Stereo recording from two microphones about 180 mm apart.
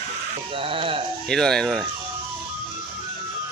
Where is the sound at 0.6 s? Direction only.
30° right (ahead or behind).